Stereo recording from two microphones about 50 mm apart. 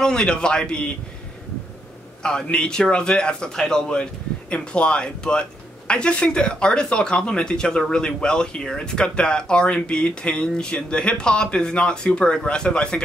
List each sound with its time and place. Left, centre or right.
0.0 s a man's voice: centre
2.2 s a man's voice: centre